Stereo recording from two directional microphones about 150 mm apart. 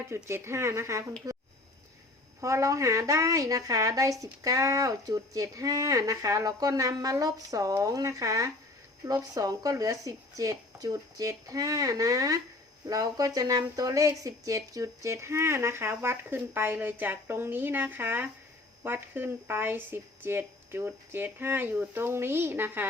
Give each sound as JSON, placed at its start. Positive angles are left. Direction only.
{"t": 0.1, "sound": "speech", "side_deg": -15}
{"t": 1.2, "sound": "a sound", "side_deg": -20}
{"t": 2.4, "sound": "speech", "side_deg": -20}